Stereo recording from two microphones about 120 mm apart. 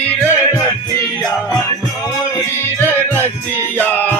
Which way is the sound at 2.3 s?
20° left (ahead or behind).